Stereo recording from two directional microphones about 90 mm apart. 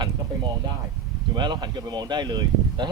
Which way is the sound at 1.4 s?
55° right (ahead or behind).